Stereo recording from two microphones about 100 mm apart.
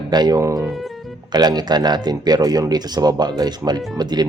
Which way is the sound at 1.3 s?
45° right (ahead or behind).